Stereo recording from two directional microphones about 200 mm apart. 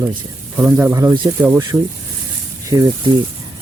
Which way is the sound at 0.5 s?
10° right (ahead or behind).